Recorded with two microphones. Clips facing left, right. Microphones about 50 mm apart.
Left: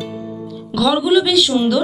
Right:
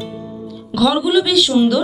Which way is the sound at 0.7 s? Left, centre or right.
Centre.